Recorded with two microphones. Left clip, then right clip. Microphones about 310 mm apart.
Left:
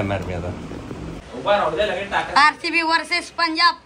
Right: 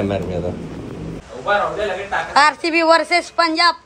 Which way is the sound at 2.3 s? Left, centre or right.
Centre.